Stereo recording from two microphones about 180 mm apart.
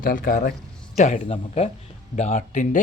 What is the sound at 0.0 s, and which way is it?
A man's voice, 50° left (ahead or behind).